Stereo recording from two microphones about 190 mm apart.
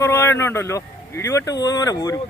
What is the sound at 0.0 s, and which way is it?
Speech, 15° left (ahead or behind).